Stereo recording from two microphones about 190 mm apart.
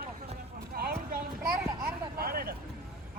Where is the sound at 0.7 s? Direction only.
55° right (ahead or behind).